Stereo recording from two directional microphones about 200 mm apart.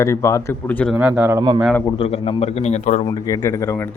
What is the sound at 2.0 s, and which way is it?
A man's voice, 30° left (ahead or behind).